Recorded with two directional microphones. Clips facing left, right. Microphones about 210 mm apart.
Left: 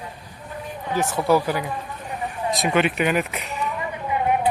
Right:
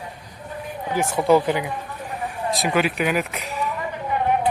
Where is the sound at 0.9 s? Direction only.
15° right (ahead or behind).